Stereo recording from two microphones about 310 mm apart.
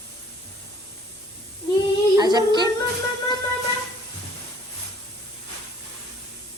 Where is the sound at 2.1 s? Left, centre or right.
Centre.